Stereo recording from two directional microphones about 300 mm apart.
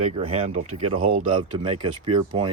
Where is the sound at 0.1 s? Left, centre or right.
Right.